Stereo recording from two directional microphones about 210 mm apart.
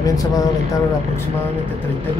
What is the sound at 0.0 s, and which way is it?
Speech, 15° left (ahead or behind).